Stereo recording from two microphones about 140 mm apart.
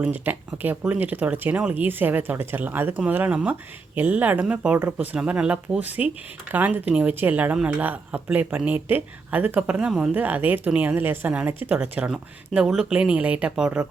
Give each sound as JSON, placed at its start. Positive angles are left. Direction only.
{"t": 0.0, "sound": "speech", "side_deg": -10}